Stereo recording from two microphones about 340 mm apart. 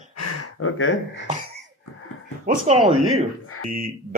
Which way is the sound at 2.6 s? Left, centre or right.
Centre.